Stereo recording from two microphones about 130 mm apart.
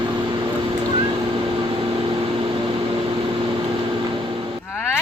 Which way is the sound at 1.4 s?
40° right (ahead or behind).